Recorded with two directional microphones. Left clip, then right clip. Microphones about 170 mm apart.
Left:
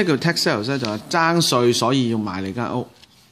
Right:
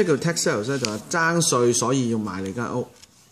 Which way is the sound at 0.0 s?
30° left (ahead or behind).